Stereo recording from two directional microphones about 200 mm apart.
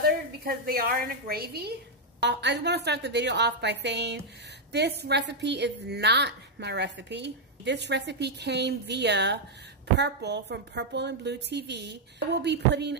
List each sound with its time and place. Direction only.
0.0 s a woman's voice: 50° right (ahead or behind)